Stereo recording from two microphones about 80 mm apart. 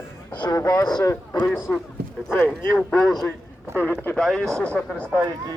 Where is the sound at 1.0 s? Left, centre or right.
Left.